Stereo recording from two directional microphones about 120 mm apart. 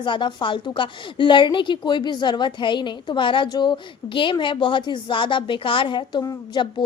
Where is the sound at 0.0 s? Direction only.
40° left (ahead or behind).